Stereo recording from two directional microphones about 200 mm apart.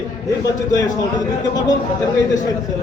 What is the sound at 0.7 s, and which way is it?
Speech, 15° left (ahead or behind).